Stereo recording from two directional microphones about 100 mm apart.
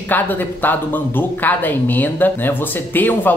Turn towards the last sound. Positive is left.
turn(degrees=20)  # may be behind; listen again after turning